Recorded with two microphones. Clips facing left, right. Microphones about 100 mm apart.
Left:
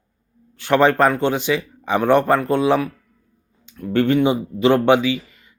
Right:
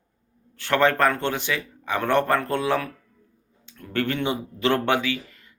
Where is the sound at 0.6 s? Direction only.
20° left (ahead or behind).